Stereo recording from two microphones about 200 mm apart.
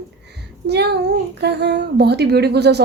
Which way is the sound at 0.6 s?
55° right (ahead or behind).